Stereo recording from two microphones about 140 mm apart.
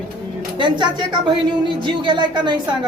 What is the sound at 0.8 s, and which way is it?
A woman's voice, 35° right (ahead or behind).